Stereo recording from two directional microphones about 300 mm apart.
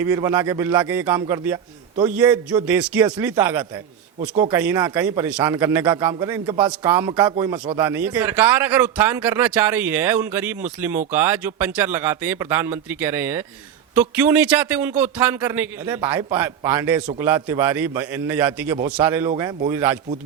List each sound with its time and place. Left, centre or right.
0.0 s a man's voice: centre